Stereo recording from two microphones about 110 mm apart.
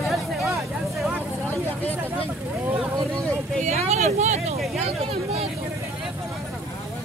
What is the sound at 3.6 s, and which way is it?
Speech, 80° right.